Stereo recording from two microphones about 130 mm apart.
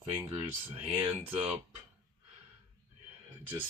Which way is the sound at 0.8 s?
45° right (ahead or behind).